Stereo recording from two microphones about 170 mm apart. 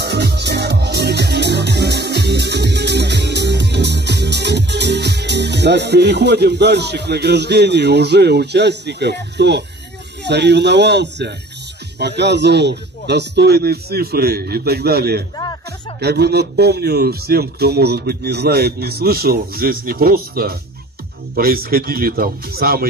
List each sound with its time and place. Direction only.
0.0 s music: 75° right (ahead or behind)
10.2 s a man's voice: 85° right; by 22.8 s 60° right (ahead or behind)